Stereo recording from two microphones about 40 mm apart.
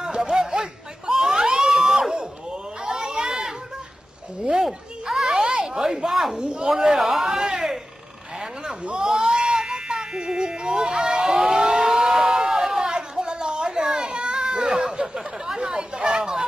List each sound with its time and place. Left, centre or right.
0.0 s a sound: centre
4.6 s a sound: centre
5.9 s speech: centre
6.3 s speech: right
6.7 s speech: centre
7.2 s a sound: centre
9.0 s music: centre
12.9 s children playing: right
15.4 s chatter: centre